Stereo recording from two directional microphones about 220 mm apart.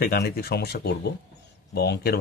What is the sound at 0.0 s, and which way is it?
Speech, 45° left (ahead or behind).